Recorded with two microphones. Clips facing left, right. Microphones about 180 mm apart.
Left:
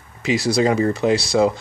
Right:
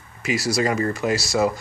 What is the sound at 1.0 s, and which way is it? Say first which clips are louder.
Speech: left 5 dB; 25° left (ahead or behind).